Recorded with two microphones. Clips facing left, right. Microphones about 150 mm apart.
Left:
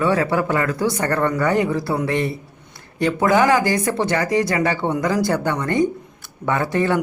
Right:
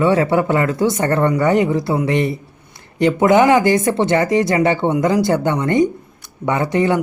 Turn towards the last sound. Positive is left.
turn(degrees=-20)  # may be behind; listen again after turning